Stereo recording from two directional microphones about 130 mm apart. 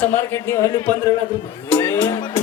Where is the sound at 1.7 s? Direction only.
15° left (ahead or behind).